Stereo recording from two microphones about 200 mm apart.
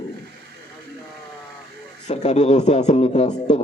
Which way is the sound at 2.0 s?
35° left (ahead or behind).